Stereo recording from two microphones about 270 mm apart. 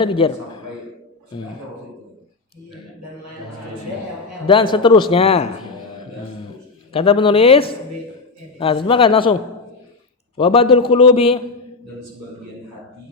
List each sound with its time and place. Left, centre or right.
0.0 s speech: centre
4.4 s speech: centre
6.9 s speech: left
10.3 s speech: centre